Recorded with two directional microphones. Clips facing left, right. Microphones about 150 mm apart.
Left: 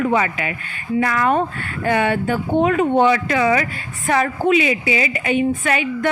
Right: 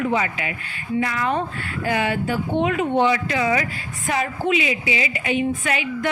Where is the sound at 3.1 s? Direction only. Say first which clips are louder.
Left 4 dB; 65° left (ahead or behind).